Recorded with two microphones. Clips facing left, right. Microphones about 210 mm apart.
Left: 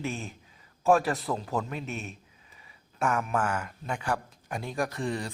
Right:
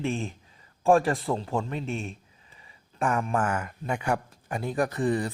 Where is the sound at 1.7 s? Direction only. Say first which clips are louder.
Right 4 dB; 30° right (ahead or behind).